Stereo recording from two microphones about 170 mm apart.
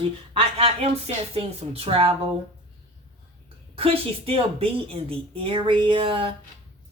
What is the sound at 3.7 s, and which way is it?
A woman's voice, 35° right (ahead or behind).